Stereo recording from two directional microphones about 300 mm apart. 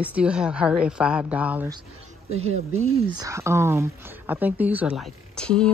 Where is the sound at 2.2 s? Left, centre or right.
Right.